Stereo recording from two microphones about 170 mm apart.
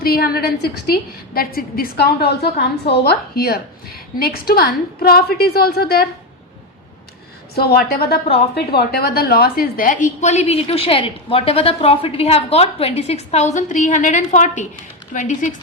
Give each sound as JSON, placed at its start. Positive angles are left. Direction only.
{"t": 0.0, "sound": "a woman's voice", "side_deg": 60}
{"t": 7.5, "sound": "a woman's voice", "side_deg": 65}